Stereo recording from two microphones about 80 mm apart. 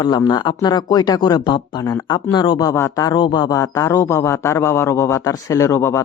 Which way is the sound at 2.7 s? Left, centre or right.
Left.